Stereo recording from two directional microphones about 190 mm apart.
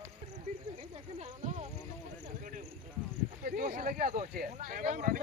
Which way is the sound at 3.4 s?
50° right (ahead or behind).